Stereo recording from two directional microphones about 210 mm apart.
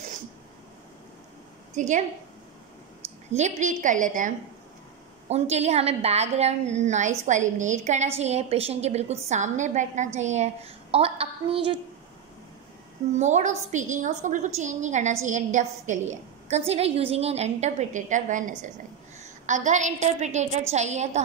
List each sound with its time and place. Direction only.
1.7 s a woman's voice: 35° right (ahead or behind)
3.3 s a woman's voice: 35° right (ahead or behind)
5.3 s a woman's voice: 30° right (ahead or behind)
13.2 s a woman's voice: 35° right (ahead or behind)